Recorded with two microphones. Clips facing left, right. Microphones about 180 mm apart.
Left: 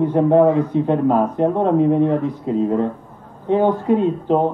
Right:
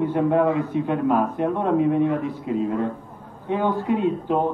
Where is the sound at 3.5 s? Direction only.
35° left (ahead or behind).